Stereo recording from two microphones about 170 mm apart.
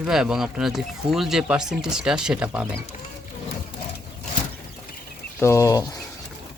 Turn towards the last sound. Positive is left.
turn(degrees=20)  # may be behind; listen again after turning